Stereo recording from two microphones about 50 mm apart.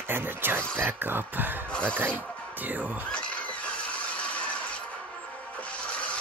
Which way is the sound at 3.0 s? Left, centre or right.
Left.